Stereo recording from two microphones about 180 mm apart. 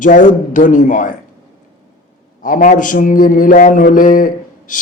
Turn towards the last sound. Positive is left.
turn(degrees=50)  # may be behind; listen again after turning